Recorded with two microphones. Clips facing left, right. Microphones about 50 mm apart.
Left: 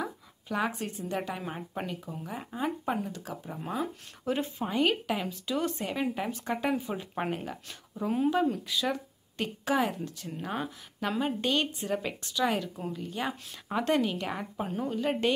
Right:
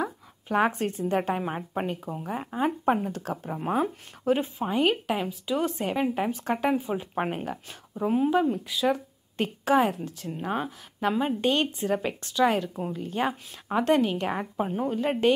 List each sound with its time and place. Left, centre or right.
0.0 s speech: right
1.4 s speech: right
5.8 s speech: right
6.5 s speech: centre
8.9 s a woman's voice: right
10.3 s speech: centre
11.4 s speech: right
12.6 s speech: right
13.0 s speech: right
13.3 s speech: centre
13.8 s speech: right
14.4 s speech: centre
14.9 s speech: right